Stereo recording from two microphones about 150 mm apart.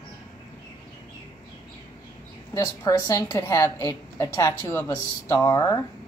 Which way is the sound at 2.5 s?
20° left (ahead or behind).